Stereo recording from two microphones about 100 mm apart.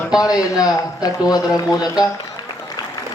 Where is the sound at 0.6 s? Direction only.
40° left (ahead or behind).